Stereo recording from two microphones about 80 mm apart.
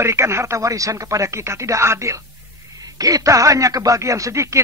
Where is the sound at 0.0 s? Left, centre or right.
Right.